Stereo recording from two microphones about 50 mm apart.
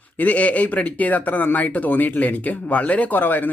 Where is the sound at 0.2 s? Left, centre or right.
Left.